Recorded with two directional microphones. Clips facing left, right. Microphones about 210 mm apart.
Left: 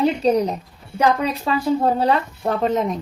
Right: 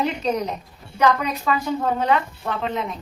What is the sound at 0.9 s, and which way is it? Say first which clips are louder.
Speech: left 1 dB; 30° left (ahead or behind).